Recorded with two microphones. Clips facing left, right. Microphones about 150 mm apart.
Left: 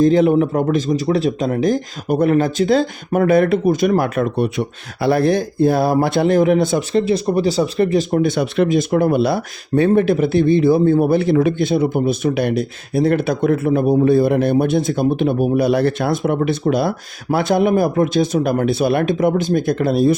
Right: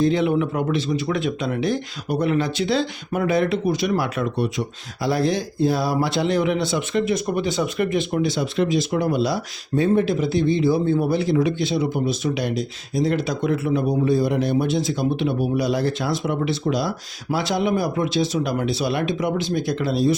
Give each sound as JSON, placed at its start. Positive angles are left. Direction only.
{"t": 0.0, "sound": "speech", "side_deg": 45}
{"t": 6.9, "sound": "speech", "side_deg": 30}